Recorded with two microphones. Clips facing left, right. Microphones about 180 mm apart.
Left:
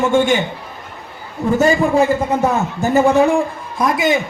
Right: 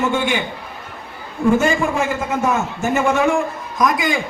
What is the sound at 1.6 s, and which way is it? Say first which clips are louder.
A man's voice: left 5 dB; 35° left (ahead or behind).